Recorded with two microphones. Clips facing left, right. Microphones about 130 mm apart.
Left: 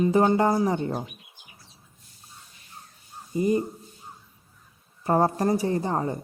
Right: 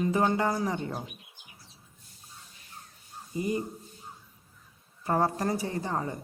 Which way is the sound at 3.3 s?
30° left (ahead or behind).